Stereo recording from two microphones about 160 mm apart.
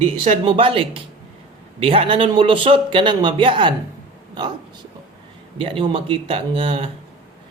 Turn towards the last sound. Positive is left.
turn(degrees=-35)  # may be behind; listen again after turning